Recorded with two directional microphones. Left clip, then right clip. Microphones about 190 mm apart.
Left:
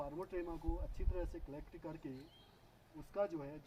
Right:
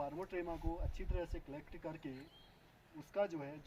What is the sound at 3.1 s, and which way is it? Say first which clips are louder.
Speech: right 1 dB; 35° right (ahead or behind).